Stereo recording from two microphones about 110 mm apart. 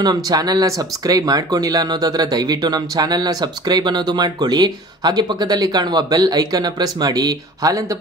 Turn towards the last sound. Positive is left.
turn(degrees=-30)  # may be behind; listen again after turning